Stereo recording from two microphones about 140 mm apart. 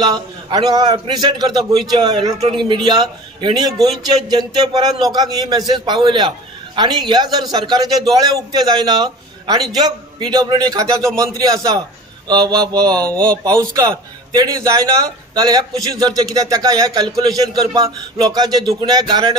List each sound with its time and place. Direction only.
0.0 s a man's voice: 30° right (ahead or behind)
13.0 s speech: 10° left (ahead or behind)
13.4 s a man's voice: 25° right (ahead or behind)